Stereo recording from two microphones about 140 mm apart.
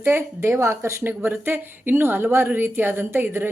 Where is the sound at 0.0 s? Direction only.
15° right (ahead or behind).